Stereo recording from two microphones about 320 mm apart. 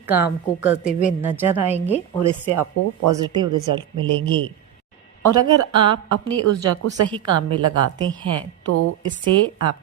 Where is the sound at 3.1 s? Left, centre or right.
Centre.